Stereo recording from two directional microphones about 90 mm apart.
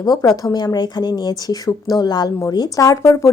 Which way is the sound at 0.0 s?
45° left (ahead or behind).